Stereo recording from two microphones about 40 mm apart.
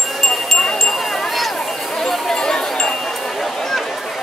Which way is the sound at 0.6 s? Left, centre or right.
Centre.